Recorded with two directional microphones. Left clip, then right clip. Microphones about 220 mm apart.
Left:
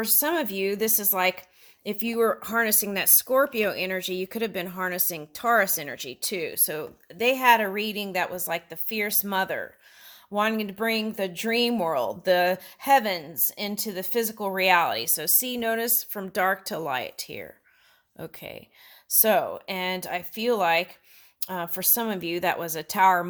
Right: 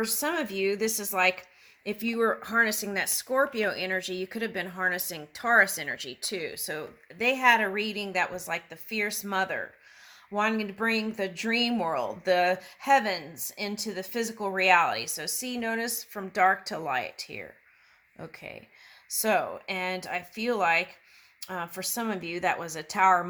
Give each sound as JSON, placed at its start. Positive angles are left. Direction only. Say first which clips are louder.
{"t": 0.0, "sound": "speech", "louder": "left 3 dB", "side_deg": 45}